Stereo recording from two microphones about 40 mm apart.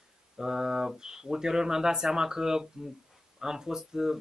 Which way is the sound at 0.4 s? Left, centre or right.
Centre.